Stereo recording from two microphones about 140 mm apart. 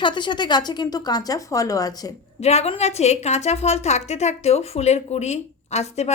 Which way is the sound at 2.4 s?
50° left (ahead or behind).